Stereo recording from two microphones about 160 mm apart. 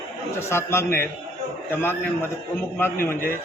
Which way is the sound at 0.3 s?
15° left (ahead or behind).